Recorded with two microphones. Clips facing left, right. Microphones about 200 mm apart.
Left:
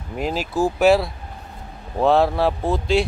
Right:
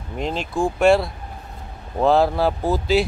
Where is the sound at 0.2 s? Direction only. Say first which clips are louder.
Left 1 dB; 5° left (ahead or behind).